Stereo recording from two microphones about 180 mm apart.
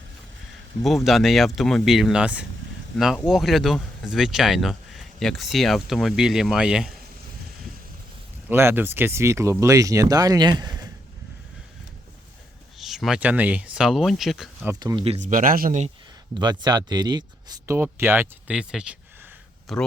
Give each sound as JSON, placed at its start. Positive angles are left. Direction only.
{"t": 0.9, "sound": "speech", "side_deg": 0}
{"t": 8.4, "sound": "speech", "side_deg": -10}
{"t": 12.8, "sound": "speech", "side_deg": 0}
{"t": 14.7, "sound": "speech", "side_deg": -20}
{"t": 15.3, "sound": "speech", "side_deg": -50}
{"t": 16.4, "sound": "speech", "side_deg": -25}